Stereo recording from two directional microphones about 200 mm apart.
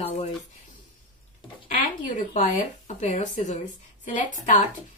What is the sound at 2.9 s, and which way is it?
Speech, 35° left (ahead or behind).